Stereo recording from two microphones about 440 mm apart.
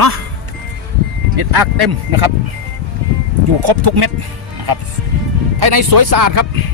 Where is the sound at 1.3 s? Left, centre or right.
Right.